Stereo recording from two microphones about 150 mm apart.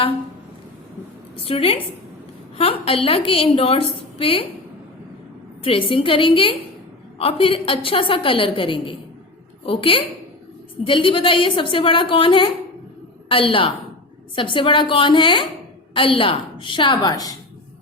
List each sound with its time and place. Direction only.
1.4 s a woman's voice: 40° left (ahead or behind)
5.6 s a woman's voice: 35° left (ahead or behind)